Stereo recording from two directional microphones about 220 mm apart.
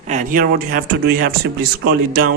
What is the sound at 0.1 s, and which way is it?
A man's voice, 35° right (ahead or behind).